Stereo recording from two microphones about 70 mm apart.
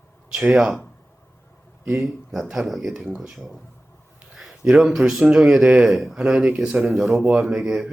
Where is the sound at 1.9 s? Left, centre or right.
Centre.